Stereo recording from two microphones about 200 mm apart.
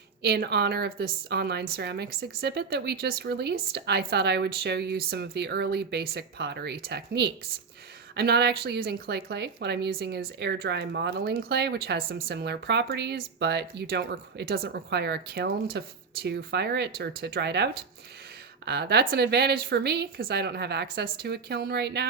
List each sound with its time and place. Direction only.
0.2 s speech: 55° right (ahead or behind)